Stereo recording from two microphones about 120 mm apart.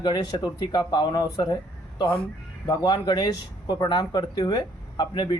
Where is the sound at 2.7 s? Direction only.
35° left (ahead or behind).